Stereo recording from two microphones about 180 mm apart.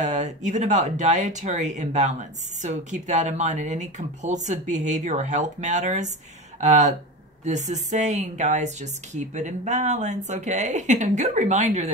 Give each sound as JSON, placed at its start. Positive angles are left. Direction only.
{"t": 0.0, "sound": "speech", "side_deg": -40}